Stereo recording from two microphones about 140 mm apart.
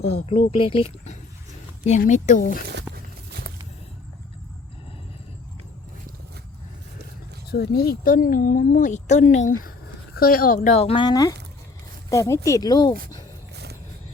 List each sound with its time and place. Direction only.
0.0 s speech: 45° left (ahead or behind)
2.0 s speech: 60° left (ahead or behind)
7.5 s speech: 90° left; by 9.7 s 65° left (ahead or behind)
10.2 s speech: 90° left; by 11.0 s 45° left (ahead or behind)
11.0 s speech: 25° left (ahead or behind)